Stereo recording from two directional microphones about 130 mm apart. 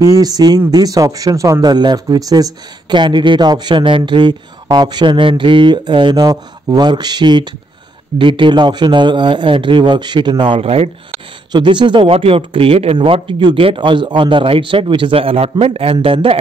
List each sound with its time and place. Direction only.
0.0 s a man's voice: 30° right (ahead or behind); by 10.9 s 50° right (ahead or behind)
11.5 s a man's voice: 35° right (ahead or behind)